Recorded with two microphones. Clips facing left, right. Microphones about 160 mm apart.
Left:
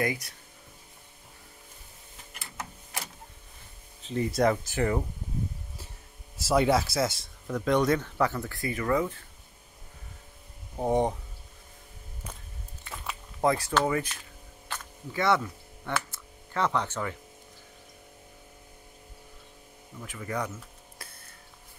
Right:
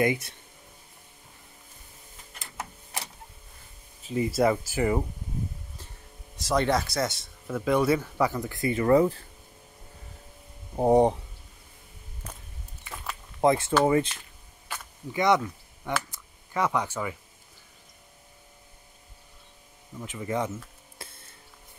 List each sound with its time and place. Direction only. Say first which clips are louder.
0.0 s speech: right 5 dB; 25° right (ahead or behind)
4.0 s speech: right 1 dB; 5° right (ahead or behind)
6.3 s speech: left 1 dB; 5° left (ahead or behind); by 9.2 s 35° right (ahead or behind)
10.8 s speech: right 6 dB; 35° right (ahead or behind)
13.4 s speech: right 4 dB; 25° right (ahead or behind)
14.7 s a sound: right 1 dB; 20° right (ahead or behind)
20.0 s speech: right 4 dB; 20° right (ahead or behind)
21.0 s a sound: right 4 dB; 25° right (ahead or behind)